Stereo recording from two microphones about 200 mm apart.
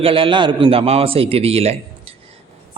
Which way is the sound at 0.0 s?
25° right (ahead or behind).